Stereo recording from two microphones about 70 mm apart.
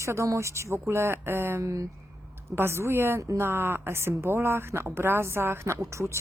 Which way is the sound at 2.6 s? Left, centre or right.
Right.